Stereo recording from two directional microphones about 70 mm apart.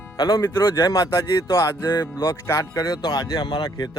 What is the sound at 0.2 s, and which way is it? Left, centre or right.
Speech, left.